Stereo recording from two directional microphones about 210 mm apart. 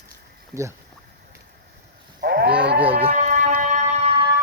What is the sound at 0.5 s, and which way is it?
Speech, 15° right (ahead or behind).